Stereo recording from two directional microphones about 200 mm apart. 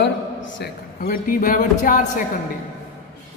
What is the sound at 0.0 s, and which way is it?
Speech, 65° left (ahead or behind).